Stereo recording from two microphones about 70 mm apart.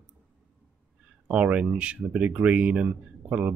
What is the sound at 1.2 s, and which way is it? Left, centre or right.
Speech, centre.